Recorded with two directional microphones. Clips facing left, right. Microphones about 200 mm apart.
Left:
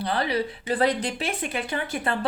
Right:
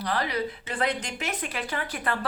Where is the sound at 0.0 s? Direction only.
30° left (ahead or behind).